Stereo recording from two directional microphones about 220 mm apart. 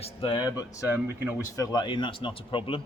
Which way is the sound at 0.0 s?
25° left (ahead or behind).